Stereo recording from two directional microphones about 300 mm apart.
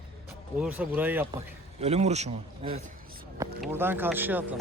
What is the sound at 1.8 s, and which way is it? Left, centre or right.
Speech, right.